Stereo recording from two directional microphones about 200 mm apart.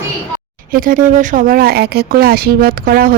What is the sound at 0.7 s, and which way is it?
Speech, 45° right (ahead or behind).